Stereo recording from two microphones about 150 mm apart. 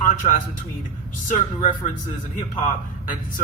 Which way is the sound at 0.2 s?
45° left (ahead or behind).